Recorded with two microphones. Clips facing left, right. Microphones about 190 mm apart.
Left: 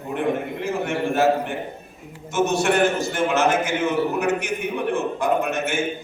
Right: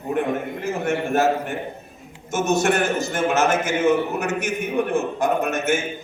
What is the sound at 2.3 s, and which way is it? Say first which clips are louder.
A man's voice: even; 45° right (ahead or behind).